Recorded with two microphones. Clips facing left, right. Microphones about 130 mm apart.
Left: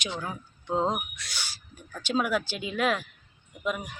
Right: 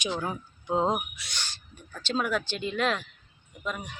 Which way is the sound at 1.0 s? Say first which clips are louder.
Right 1 dB; centre (ahead or behind).